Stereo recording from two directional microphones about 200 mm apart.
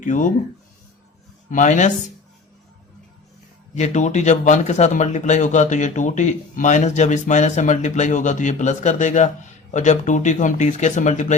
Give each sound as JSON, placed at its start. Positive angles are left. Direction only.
{"t": 0.0, "sound": "speech", "side_deg": 40}
{"t": 1.5, "sound": "speech", "side_deg": 40}
{"t": 3.8, "sound": "speech", "side_deg": 35}